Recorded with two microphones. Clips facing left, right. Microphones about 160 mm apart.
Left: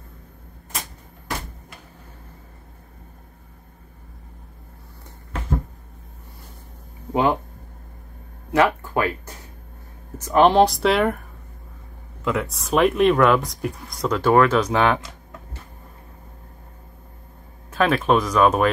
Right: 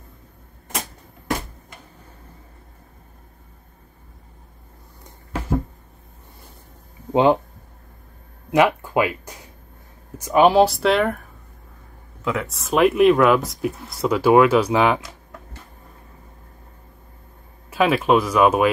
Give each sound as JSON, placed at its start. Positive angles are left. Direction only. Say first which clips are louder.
{"t": 7.1, "sound": "a sound", "louder": "right 4 dB", "side_deg": -20}
{"t": 8.5, "sound": "speech", "louder": "right 2 dB", "side_deg": -15}
{"t": 12.3, "sound": "speech", "louder": "left 1 dB", "side_deg": 0}
{"t": 17.6, "sound": "speech", "louder": "right 1 dB", "side_deg": -10}